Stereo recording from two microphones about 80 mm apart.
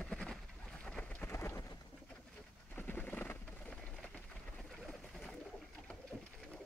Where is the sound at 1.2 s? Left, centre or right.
Left.